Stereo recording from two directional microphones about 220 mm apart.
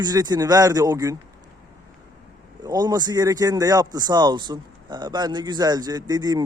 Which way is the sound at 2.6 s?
20° right (ahead or behind).